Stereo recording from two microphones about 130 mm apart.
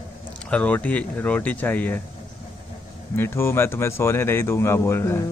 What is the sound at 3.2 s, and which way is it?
Speech, 20° left (ahead or behind).